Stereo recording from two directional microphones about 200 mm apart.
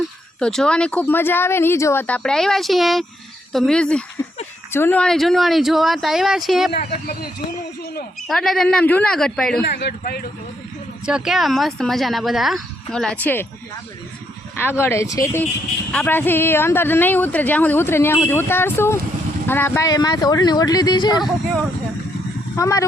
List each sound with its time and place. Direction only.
0.3 s speech: 5° left (ahead or behind)
6.7 s speech: 50° left (ahead or behind)
8.3 s speech: centre (ahead or behind)
9.6 s speech: 55° left (ahead or behind)
11.0 s speech: 5° right (ahead or behind)
14.6 s speech: 10° left (ahead or behind)
22.5 s speech: 15° left (ahead or behind)